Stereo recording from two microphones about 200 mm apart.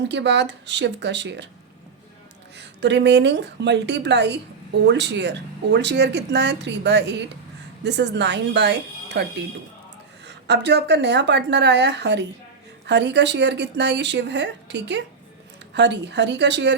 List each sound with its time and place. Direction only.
0.1 s speech: 60° right (ahead or behind)
2.6 s speech: 60° right (ahead or behind)
10.2 s speech: 60° right (ahead or behind)